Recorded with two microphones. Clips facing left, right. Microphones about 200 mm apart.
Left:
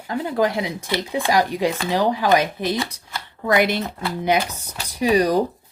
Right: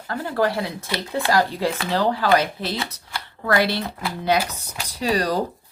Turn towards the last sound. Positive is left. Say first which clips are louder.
# left 4 dB
turn(degrees=15)  # may be behind; listen again after turning